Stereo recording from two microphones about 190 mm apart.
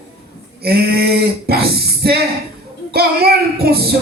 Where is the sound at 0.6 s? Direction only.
55° right (ahead or behind).